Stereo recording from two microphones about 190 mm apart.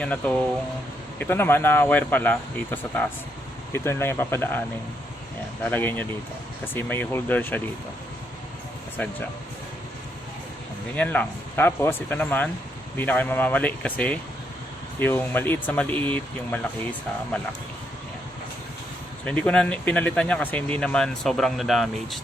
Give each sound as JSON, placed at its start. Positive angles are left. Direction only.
{"t": 0.0, "sound": "speech", "side_deg": 5}
{"t": 5.6, "sound": "speech", "side_deg": 10}
{"t": 9.0, "sound": "speech", "side_deg": 10}
{"t": 10.9, "sound": "speech", "side_deg": 10}
{"t": 19.2, "sound": "speech", "side_deg": 5}